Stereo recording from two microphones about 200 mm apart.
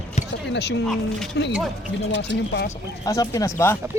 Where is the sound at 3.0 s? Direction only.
15° left (ahead or behind).